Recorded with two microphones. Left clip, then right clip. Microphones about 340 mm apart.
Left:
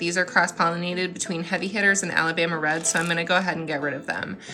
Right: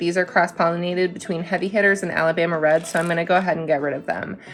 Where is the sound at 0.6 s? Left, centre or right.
Centre.